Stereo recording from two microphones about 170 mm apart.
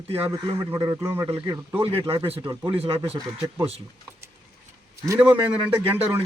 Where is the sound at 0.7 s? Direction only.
15° right (ahead or behind).